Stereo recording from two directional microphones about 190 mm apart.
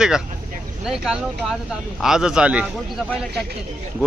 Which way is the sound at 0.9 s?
Centre (ahead or behind).